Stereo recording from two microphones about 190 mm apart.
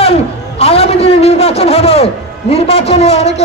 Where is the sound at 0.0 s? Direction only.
30° left (ahead or behind).